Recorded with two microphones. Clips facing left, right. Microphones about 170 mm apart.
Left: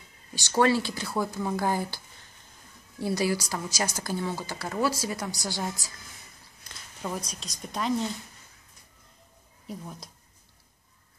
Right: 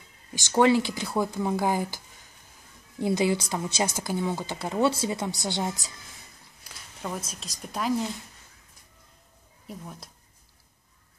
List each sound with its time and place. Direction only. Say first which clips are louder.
0.3 s a woman's voice: right 3 dB; 15° right (ahead or behind)
3.0 s a woman's voice: right 3 dB; 20° right (ahead or behind)
5.9 s a sound: even; centre (ahead or behind)
7.0 s a woman's voice: even; centre (ahead or behind)
9.7 s a woman's voice: left 1 dB; centre (ahead or behind)